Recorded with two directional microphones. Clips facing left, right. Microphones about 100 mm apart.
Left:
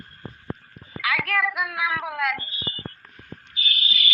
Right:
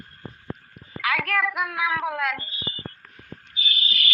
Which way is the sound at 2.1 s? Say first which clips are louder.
Even; 30° right (ahead or behind).